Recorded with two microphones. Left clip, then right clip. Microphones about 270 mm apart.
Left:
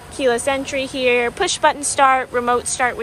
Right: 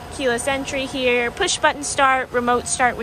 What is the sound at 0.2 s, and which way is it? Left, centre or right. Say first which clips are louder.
Speech: left 3 dB; centre.